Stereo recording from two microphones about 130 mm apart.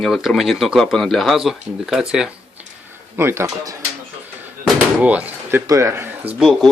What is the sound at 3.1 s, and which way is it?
Speech, 20° right (ahead or behind).